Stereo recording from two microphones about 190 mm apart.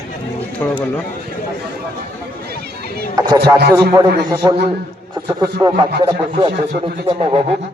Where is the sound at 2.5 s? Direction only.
55° right (ahead or behind).